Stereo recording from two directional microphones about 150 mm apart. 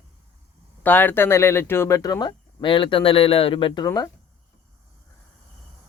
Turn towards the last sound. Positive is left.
turn(degrees=20)  # may be behind; listen again after turning